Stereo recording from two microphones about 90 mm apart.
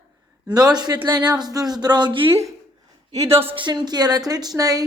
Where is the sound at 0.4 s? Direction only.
50° right (ahead or behind).